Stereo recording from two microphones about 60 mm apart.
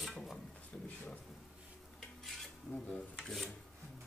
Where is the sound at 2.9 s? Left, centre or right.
Centre.